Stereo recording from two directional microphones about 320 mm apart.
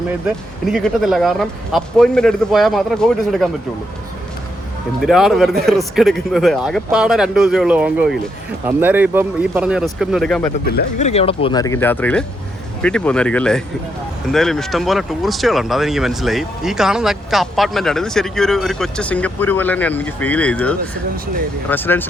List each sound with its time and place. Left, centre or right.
0.6 s speech: centre
5.0 s speech: centre
10.7 s speech: left; by 22.1 s centre